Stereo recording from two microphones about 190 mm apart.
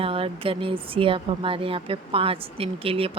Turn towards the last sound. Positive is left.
turn(degrees=-30)  # may be behind; listen again after turning